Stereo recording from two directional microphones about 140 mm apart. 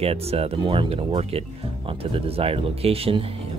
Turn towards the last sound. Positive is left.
turn(degrees=-45)  # may be behind; listen again after turning